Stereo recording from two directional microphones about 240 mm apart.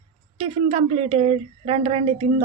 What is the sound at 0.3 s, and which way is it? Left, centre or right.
A woman's voice, right.